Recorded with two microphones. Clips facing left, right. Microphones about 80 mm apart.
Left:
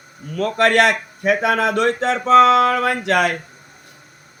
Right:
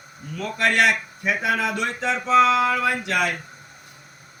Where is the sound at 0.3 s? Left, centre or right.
Left.